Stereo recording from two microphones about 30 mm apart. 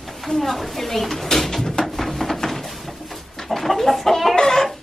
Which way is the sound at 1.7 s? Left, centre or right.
Centre.